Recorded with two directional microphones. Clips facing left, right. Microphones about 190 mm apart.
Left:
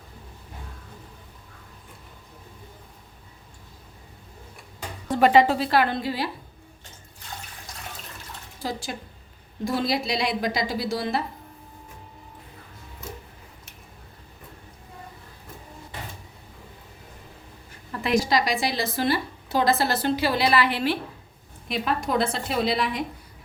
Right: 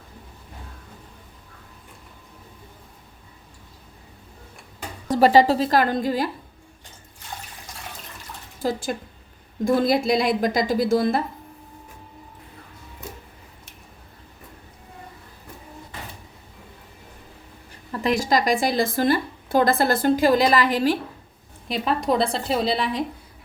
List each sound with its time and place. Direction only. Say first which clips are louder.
5.0 s a woman's voice: right 2 dB; 35° right (ahead or behind)
8.6 s a woman's voice: right 6 dB; 50° right (ahead or behind)
18.2 s a woman's voice: right 3 dB; 45° right (ahead or behind)